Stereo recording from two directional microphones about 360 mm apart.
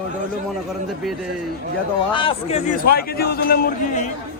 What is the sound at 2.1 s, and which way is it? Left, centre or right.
A man's voice, centre.